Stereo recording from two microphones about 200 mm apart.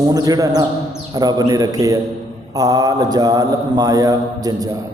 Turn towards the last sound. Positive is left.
turn(degrees=-20)  # may be behind; listen again after turning